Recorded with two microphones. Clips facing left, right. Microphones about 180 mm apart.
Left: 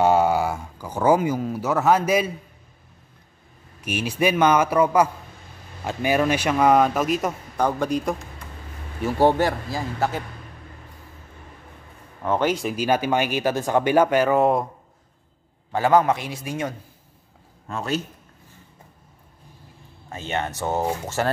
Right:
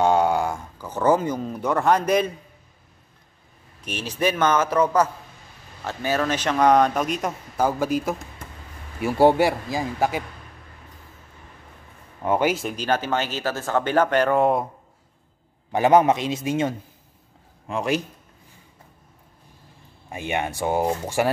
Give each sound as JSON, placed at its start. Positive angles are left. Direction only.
{"t": 0.0, "sound": "speech", "side_deg": 5}
{"t": 3.8, "sound": "a man's voice", "side_deg": 10}
{"t": 12.2, "sound": "speech", "side_deg": -10}
{"t": 15.7, "sound": "a man's voice", "side_deg": -20}
{"t": 17.6, "sound": "a man's voice", "side_deg": -15}
{"t": 20.1, "sound": "a man's voice", "side_deg": -15}